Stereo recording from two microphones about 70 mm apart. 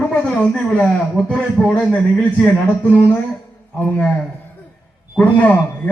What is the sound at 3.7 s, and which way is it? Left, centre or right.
A man's voice, centre.